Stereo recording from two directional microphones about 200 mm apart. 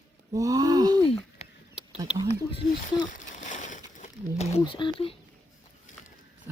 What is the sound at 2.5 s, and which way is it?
Speech, 20° left (ahead or behind).